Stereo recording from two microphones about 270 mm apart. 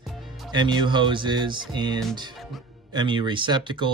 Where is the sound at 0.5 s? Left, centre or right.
Centre.